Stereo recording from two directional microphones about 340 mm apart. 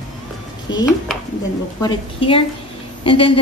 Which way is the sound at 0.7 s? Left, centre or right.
Centre.